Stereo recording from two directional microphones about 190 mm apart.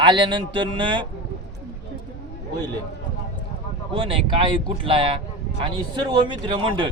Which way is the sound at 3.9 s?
30° right (ahead or behind).